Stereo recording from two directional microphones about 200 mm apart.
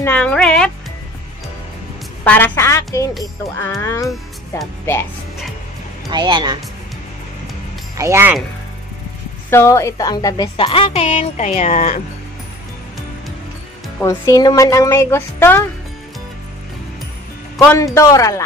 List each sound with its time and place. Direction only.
0.0 s speech: 5° left (ahead or behind)
2.2 s speech: 10° left (ahead or behind)
6.0 s speech: 20° right (ahead or behind)
8.0 s speech: 10° right (ahead or behind)
9.5 s a woman's voice: 15° left (ahead or behind); by 12.0 s 35° left (ahead or behind)
13.9 s speech: 15° left (ahead or behind)
17.6 s a man's voice: 15° left (ahead or behind)